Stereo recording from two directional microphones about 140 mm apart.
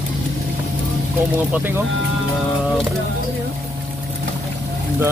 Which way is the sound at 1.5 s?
15° right (ahead or behind).